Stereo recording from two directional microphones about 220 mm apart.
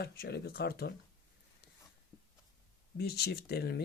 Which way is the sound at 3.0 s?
45° left (ahead or behind).